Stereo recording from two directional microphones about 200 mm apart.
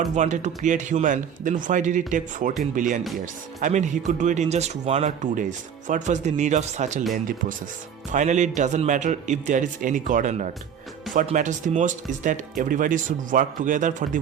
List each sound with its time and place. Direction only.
0.2 s speech: 35° right (ahead or behind)
8.1 s speech: 35° right (ahead or behind)